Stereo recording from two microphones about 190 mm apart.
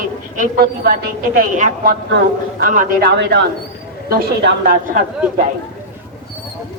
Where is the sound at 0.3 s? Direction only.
50° right (ahead or behind).